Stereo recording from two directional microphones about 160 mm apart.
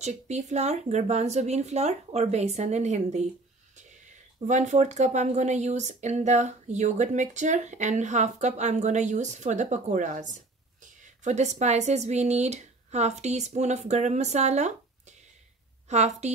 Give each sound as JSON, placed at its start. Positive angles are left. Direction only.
{"t": 0.0, "sound": "speech", "side_deg": -45}
{"t": 4.4, "sound": "speech", "side_deg": -50}